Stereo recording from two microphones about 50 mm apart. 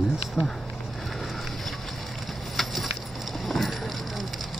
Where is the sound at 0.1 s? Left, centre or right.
Centre.